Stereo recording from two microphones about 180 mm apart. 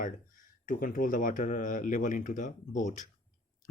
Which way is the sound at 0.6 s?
50° left (ahead or behind).